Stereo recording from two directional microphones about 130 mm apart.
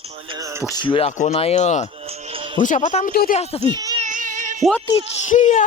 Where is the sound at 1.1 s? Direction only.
65° left (ahead or behind).